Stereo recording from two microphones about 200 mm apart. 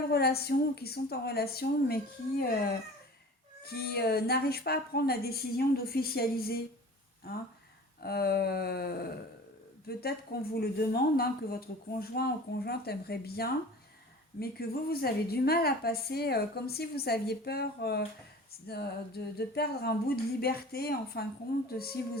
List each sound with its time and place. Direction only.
0.1 s a woman's voice: 50° left (ahead or behind)
8.0 s a woman's voice: 50° left (ahead or behind)